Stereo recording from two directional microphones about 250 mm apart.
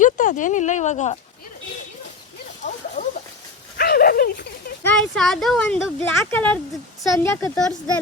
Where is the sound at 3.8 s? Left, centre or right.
Left.